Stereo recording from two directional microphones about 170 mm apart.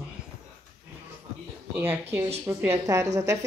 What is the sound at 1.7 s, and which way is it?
Speech, 10° right (ahead or behind).